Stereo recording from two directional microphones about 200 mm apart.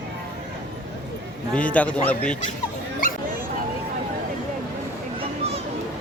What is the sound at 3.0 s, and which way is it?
Dog, 45° left (ahead or behind).